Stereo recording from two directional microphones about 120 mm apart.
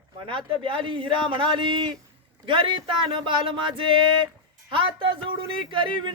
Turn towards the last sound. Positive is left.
turn(degrees=-45)  # may be behind; listen again after turning